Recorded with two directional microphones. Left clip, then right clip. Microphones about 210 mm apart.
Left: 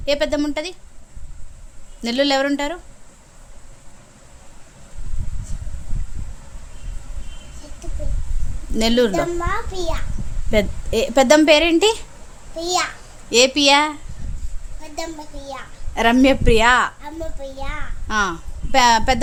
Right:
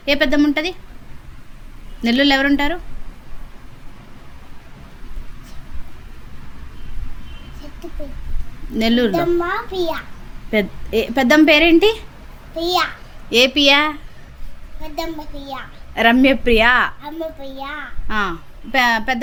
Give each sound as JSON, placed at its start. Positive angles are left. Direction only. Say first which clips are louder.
{"t": 0.0, "sound": "a woman's voice", "louder": "right 4 dB", "side_deg": 25}
{"t": 2.0, "sound": "a woman's voice", "louder": "right 3 dB", "side_deg": 25}
{"t": 8.7, "sound": "a woman's voice", "louder": "even", "side_deg": 25}
{"t": 9.4, "sound": "a woman's voice", "louder": "right 4 dB", "side_deg": 5}
{"t": 10.5, "sound": "a woman's voice", "louder": "right 1 dB", "side_deg": 25}
{"t": 12.5, "sound": "a woman's voice", "louder": "right 3 dB", "side_deg": 5}
{"t": 13.3, "sound": "speech", "louder": "right 1 dB", "side_deg": 15}
{"t": 14.8, "sound": "a woman's voice", "louder": "right 3 dB", "side_deg": 0}
{"t": 16.0, "sound": "speech", "louder": "right 2 dB", "side_deg": 15}
{"t": 17.0, "sound": "a woman's voice", "louder": "right 3 dB", "side_deg": 5}
{"t": 18.1, "sound": "a woman's voice", "louder": "left 1 dB", "side_deg": 20}